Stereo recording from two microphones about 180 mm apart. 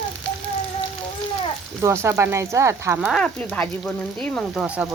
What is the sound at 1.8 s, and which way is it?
Speech, 15° right (ahead or behind).